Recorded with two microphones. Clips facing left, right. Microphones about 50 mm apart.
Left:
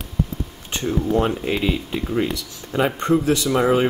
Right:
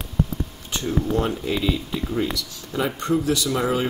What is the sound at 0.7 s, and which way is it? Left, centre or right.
Speech, left.